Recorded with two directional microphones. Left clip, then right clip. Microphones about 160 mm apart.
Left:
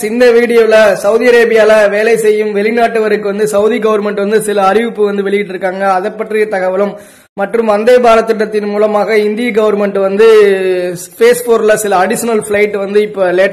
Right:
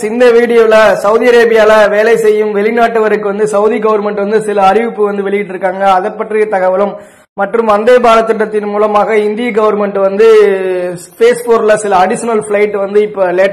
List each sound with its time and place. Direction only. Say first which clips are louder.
0.5 s a man's voice: right 1 dB; 25° left (ahead or behind)